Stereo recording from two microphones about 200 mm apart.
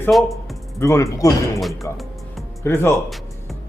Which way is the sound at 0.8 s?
15° left (ahead or behind).